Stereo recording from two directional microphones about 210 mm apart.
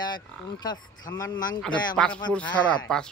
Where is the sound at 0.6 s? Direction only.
20° left (ahead or behind).